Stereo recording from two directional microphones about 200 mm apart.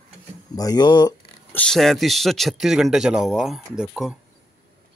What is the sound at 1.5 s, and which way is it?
A man's voice, 5° left (ahead or behind).